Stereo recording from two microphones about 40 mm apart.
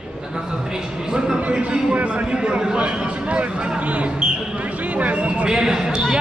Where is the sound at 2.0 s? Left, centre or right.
Right.